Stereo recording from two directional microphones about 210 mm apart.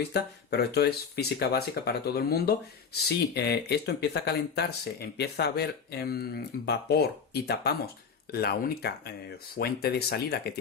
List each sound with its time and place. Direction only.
0.1 s speech: 50° left (ahead or behind)